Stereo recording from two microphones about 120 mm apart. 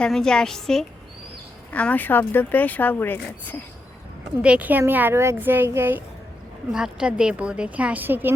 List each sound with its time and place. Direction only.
0.0 s a woman's voice: 5° left (ahead or behind)
4.4 s a woman's voice: 10° right (ahead or behind)
6.7 s a woman's voice: 5° right (ahead or behind)